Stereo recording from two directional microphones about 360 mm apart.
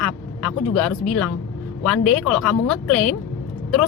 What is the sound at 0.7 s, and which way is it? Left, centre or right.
Speech, left.